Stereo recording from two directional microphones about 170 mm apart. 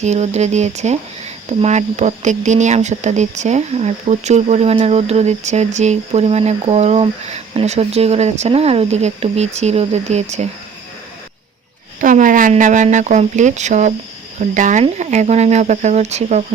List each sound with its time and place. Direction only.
0.0 s speech: 40° right (ahead or behind)
11.9 s speech: 50° right (ahead or behind)